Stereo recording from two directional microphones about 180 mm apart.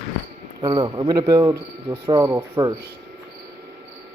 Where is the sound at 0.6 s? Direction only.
25° right (ahead or behind).